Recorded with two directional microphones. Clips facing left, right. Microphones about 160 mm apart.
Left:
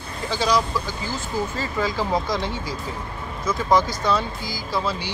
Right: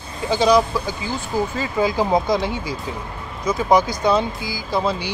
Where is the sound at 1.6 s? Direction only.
15° right (ahead or behind).